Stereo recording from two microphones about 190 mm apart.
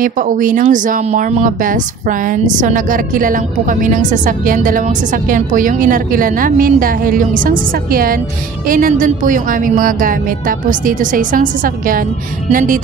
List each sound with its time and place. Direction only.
0.0 s speech: 45° right (ahead or behind)